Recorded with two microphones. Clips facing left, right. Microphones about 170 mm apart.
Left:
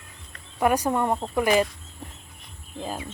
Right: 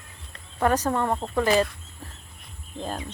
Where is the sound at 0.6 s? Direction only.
10° left (ahead or behind).